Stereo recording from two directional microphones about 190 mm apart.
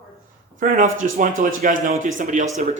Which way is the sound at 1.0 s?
45° right (ahead or behind).